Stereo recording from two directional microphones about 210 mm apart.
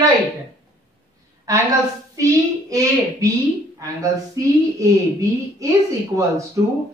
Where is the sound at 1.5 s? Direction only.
15° right (ahead or behind).